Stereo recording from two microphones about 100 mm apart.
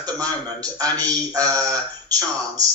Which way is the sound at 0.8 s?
40° right (ahead or behind).